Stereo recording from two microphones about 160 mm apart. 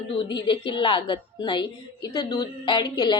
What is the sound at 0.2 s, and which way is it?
A woman's voice, 30° left (ahead or behind).